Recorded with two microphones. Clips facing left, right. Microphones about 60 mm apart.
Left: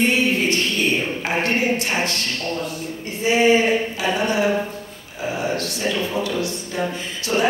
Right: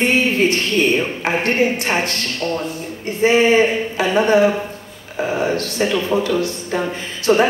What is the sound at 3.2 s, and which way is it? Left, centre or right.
Speech, right.